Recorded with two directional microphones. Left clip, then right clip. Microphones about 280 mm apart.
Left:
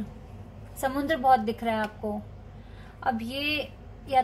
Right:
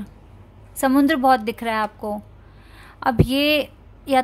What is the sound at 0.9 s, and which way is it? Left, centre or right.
Speech, right.